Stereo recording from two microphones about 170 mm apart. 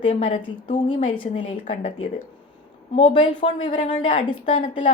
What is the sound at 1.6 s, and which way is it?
Speech, 45° left (ahead or behind).